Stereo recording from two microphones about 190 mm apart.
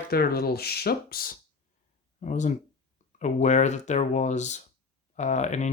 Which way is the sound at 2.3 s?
40° left (ahead or behind).